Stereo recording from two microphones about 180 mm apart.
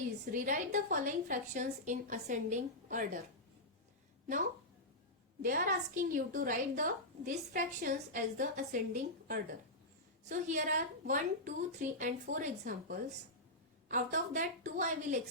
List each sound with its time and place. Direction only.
0.3 s a woman's voice: 45° right (ahead or behind)
5.4 s a woman's voice: 50° right (ahead or behind)